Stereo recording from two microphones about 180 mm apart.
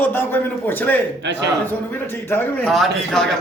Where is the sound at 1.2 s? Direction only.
75° right (ahead or behind).